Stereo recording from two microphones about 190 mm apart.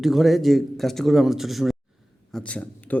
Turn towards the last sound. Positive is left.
turn(degrees=5)  # may be behind; listen again after turning